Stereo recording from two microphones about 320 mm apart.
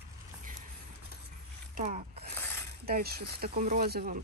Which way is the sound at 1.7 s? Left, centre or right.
Right.